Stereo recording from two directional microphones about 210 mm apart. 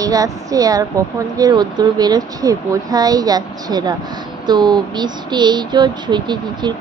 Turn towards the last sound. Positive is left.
turn(degrees=-20)  # may be behind; listen again after turning